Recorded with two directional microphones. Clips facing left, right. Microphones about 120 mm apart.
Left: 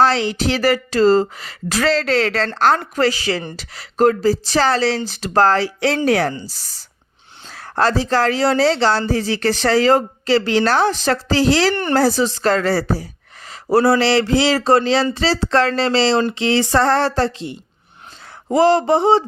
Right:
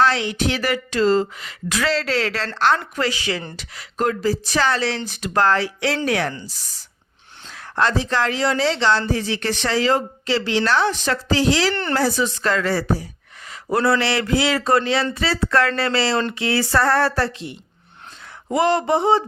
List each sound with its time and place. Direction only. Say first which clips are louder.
0.0 s speech: left 3 dB; 35° left (ahead or behind)
7.4 s speech: left 3 dB; 40° left (ahead or behind)
11.7 s speech: left 4 dB; 15° left (ahead or behind)
11.9 s speech: left 4 dB; 35° left (ahead or behind)